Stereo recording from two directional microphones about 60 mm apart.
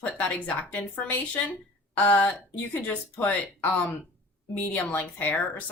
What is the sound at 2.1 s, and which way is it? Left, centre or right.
Speech, left.